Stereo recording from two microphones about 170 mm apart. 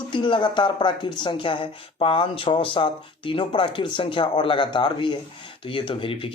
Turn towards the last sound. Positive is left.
turn(degrees=30)  # may be behind; listen again after turning